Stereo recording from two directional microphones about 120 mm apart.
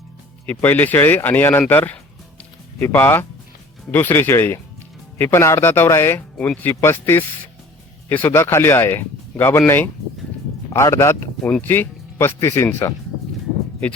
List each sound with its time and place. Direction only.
0.6 s speech: 15° left (ahead or behind)
6.3 s speech: 10° left (ahead or behind)
11.4 s speech: 15° left (ahead or behind)